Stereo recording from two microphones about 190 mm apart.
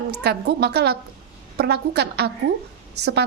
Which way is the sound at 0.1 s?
60° right (ahead or behind).